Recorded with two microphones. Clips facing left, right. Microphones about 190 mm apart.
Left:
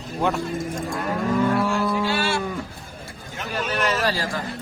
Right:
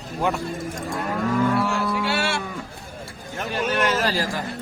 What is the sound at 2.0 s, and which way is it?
Cattle, 70° right (ahead or behind).